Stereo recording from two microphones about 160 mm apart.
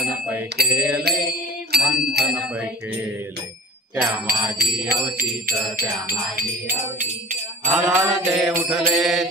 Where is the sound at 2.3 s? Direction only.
10° right (ahead or behind).